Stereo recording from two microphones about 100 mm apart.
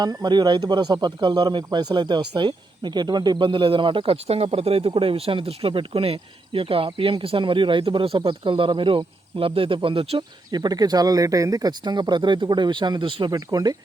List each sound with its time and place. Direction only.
0.0 s speech: 45° right (ahead or behind); by 4.9 s 75° right (ahead or behind)
4.9 s speech: 65° right (ahead or behind)
10.5 s speech: 45° right (ahead or behind)